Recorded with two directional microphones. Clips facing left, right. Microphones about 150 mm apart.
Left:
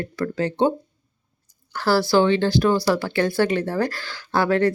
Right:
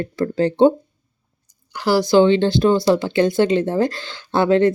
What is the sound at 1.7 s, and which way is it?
Speech, 15° right (ahead or behind).